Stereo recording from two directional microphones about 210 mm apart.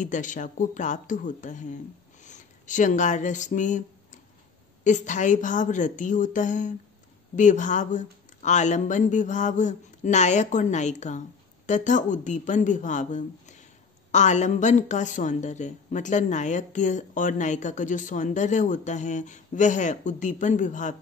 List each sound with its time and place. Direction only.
0.0 s speech: 35° left (ahead or behind)